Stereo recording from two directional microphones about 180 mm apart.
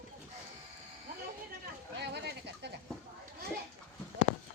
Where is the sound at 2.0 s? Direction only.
70° right (ahead or behind).